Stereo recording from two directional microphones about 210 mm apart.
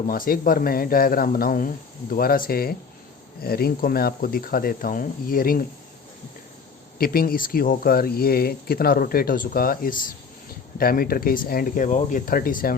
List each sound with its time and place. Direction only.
0.1 s speech: 45° left (ahead or behind)
7.0 s speech: 45° left (ahead or behind)